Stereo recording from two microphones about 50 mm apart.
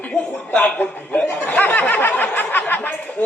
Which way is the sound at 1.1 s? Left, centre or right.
Left.